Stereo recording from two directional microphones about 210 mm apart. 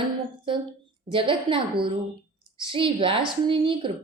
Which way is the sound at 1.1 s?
25° right (ahead or behind).